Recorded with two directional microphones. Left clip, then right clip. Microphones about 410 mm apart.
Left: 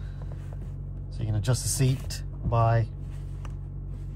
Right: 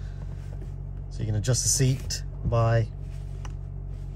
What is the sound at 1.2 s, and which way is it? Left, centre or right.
Speech, centre.